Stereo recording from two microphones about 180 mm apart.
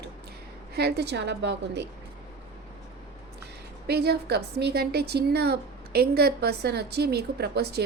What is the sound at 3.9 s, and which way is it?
A woman's voice, 65° right (ahead or behind).